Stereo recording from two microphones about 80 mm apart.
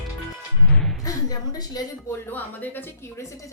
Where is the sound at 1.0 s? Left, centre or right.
Left.